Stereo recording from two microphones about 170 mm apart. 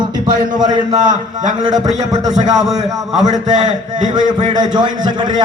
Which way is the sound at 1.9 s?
45° right (ahead or behind).